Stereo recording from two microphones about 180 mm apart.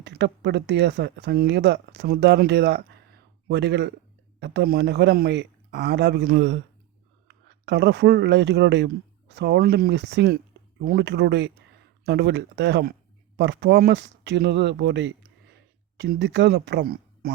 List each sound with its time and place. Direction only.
0.0 s speech: 75° right (ahead or behind); by 17.3 s 55° right (ahead or behind)